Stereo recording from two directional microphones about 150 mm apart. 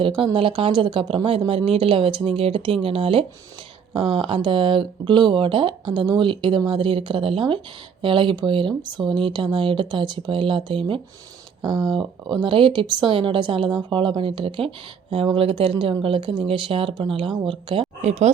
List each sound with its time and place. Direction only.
0.3 s speech: 35° right (ahead or behind)